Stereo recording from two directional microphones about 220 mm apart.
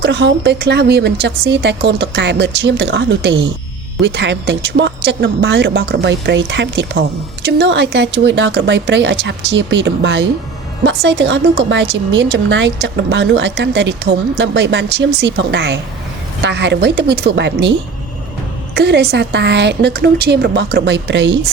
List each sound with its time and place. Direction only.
0.0 s a woman's voice: 50° right (ahead or behind)